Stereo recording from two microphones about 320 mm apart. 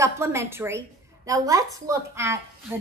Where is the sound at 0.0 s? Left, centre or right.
Centre.